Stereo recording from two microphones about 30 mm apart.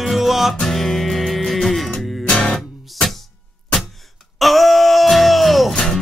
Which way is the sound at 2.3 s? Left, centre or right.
Left.